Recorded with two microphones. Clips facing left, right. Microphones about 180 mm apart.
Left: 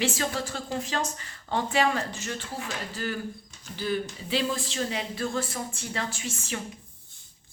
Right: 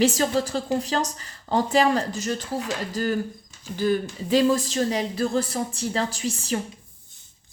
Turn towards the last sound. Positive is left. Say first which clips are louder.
# right 8 dB
turn(degrees=-35)  # may be behind; listen again after turning